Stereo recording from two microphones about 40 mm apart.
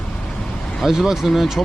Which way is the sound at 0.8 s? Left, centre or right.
Centre.